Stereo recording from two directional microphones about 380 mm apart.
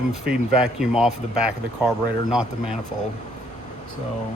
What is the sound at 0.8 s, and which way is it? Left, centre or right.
Speech, centre.